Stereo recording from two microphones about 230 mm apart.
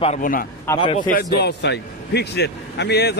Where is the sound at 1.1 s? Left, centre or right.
Left.